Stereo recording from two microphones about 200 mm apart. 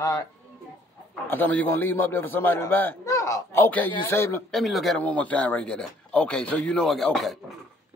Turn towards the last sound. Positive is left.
turn(degrees=0)  # may be behind; listen again after turning